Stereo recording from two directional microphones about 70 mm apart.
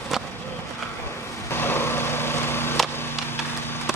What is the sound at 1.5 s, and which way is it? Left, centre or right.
Vehicle, left.